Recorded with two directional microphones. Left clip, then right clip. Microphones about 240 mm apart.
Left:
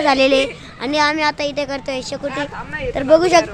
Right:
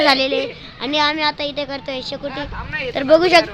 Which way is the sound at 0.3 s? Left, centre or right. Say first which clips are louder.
Left 5 dB; left.